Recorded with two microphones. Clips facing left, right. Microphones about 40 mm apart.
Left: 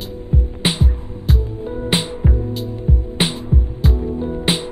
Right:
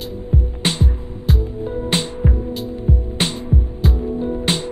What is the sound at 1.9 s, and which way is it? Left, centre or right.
Music, centre.